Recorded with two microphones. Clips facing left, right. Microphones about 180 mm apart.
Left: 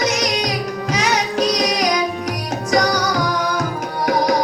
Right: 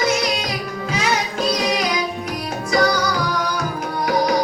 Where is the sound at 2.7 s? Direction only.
40° left (ahead or behind).